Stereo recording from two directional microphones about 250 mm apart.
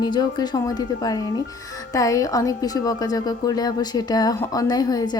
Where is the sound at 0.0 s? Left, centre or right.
Centre.